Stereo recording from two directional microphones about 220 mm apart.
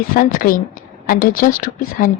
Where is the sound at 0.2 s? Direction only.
40° left (ahead or behind).